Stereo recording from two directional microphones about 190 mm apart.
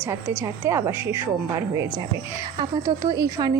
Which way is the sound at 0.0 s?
10° right (ahead or behind).